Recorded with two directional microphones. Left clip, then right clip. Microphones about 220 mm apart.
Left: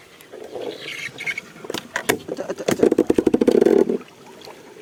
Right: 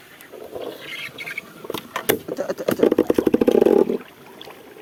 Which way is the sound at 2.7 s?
25° left (ahead or behind).